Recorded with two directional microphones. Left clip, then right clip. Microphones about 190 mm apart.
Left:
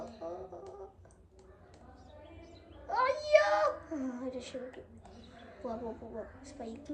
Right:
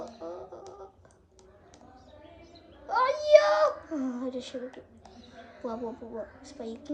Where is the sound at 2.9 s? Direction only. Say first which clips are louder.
Right 7 dB; 10° right (ahead or behind).